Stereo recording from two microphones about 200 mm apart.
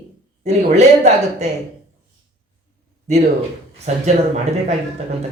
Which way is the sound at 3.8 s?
35° right (ahead or behind).